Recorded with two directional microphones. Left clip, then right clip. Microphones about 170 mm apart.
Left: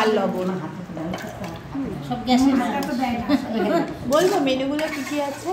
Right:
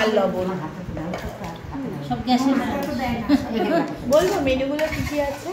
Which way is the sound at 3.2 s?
20° left (ahead or behind).